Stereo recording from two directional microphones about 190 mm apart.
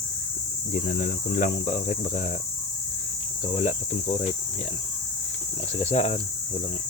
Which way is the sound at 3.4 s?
35° left (ahead or behind).